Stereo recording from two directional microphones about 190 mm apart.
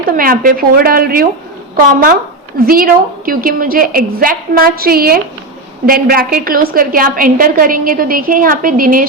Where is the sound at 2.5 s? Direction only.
50° right (ahead or behind).